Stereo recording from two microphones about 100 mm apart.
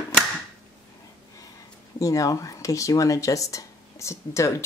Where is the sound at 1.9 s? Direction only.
35° left (ahead or behind).